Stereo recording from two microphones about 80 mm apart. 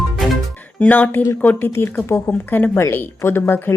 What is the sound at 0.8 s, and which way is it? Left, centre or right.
Speech, left.